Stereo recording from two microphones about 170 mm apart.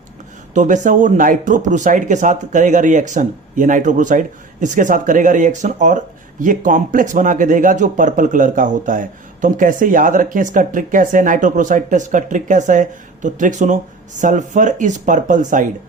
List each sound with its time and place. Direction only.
0.5 s speech: 45° right (ahead or behind)